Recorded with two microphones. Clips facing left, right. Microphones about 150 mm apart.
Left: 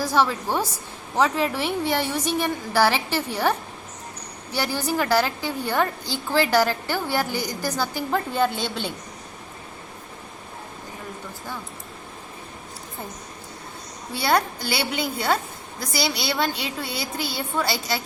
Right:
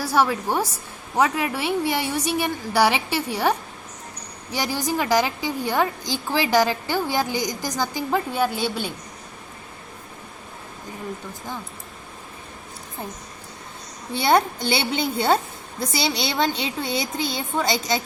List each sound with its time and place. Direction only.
0.0 s a woman's voice: 10° right (ahead or behind)
4.5 s a woman's voice: 15° right (ahead or behind)
14.1 s a woman's voice: 20° right (ahead or behind)